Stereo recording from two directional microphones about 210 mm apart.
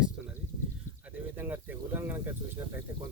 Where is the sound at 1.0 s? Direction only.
10° right (ahead or behind).